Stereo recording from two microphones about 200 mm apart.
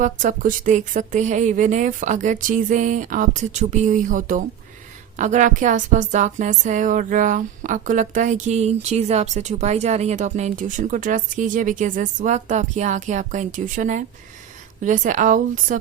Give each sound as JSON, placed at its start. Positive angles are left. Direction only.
{"t": 0.0, "sound": "a woman's voice", "side_deg": -40}